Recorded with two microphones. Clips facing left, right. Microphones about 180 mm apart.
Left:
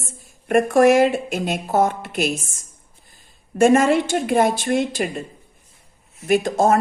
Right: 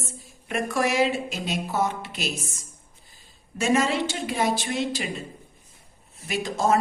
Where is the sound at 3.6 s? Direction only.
50° left (ahead or behind).